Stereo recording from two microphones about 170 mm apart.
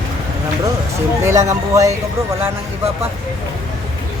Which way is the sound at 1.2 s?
20° right (ahead or behind).